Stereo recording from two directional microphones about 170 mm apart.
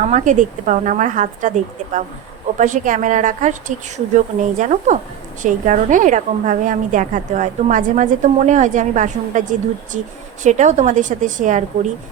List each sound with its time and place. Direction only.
0.0 s a woman's voice: 45° right (ahead or behind)